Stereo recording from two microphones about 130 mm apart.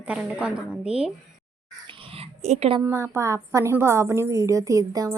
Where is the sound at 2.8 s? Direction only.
20° right (ahead or behind).